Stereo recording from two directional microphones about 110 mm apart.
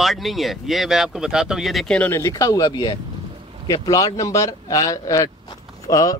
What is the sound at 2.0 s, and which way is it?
A man's voice, 20° left (ahead or behind).